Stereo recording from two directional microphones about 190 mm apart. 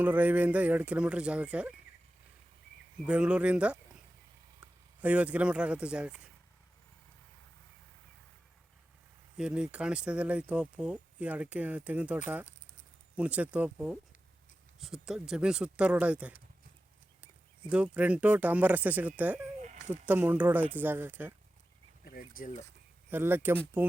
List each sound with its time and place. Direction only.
0.0 s speech: 10° right (ahead or behind)
3.1 s speech: 5° right (ahead or behind)
9.4 s speech: 5° right (ahead or behind)
17.7 s speech: 5° right (ahead or behind)
22.0 s speech: 50° left (ahead or behind)
23.0 s speech: 10° right (ahead or behind)